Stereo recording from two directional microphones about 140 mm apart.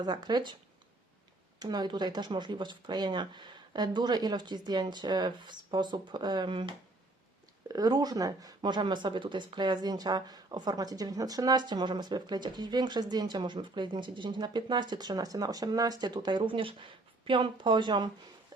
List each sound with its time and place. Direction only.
0.0 s speech: 30° right (ahead or behind)
1.5 s speech: 30° right (ahead or behind)